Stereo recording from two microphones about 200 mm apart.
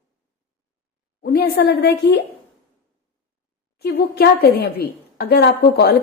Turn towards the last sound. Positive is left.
turn(degrees=55)  # may be behind; listen again after turning